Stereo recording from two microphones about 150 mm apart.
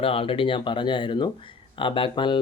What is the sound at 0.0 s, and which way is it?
Speech, 40° left (ahead or behind).